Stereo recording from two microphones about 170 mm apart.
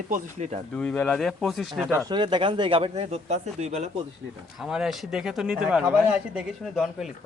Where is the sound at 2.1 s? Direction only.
25° right (ahead or behind).